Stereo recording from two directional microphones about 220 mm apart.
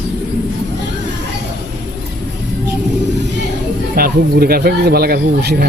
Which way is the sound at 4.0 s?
45° right (ahead or behind).